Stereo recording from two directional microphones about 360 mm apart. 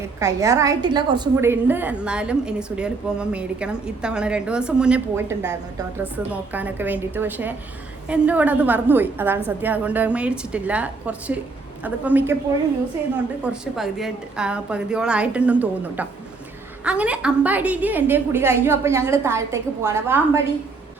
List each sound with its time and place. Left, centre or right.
0.2 s a woman's voice: centre
13.4 s a woman's voice: centre